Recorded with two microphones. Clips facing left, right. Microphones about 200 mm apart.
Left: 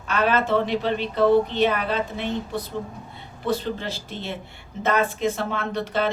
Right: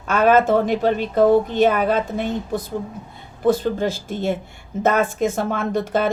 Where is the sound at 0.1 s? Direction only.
45° right (ahead or behind).